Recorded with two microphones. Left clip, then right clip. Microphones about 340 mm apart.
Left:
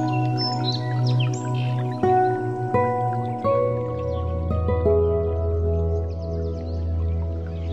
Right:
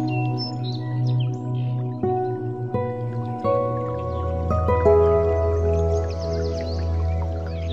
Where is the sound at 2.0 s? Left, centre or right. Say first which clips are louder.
Left 5 dB; left.